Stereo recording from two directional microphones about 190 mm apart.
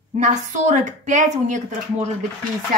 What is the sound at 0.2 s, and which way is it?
A woman's voice, 40° right (ahead or behind).